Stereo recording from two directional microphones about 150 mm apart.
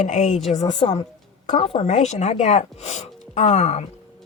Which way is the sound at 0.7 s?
30° left (ahead or behind).